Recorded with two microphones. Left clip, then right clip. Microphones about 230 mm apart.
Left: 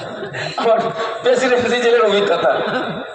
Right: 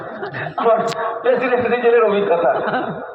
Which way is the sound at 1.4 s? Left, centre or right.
Left.